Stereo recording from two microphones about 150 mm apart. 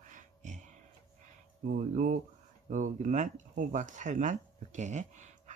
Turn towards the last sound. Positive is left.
turn(degrees=-50)  # may be behind; listen again after turning